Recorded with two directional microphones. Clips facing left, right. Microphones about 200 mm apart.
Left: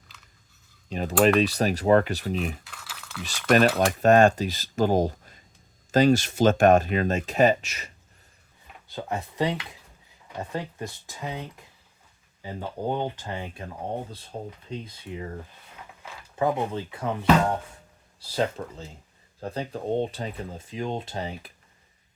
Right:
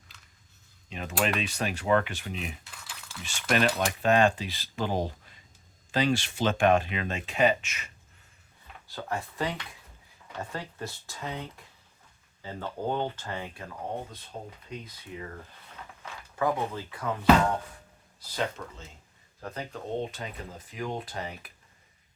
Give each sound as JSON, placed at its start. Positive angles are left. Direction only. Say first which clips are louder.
{"t": 0.9, "sound": "speech", "louder": "left 9 dB", "side_deg": 40}
{"t": 2.6, "sound": "a sound", "louder": "left 3 dB", "side_deg": 0}
{"t": 3.2, "sound": "speech", "louder": "left 6 dB", "side_deg": 40}
{"t": 8.9, "sound": "speech", "louder": "left 3 dB", "side_deg": 20}
{"t": 16.3, "sound": "speech", "louder": "left 3 dB", "side_deg": 25}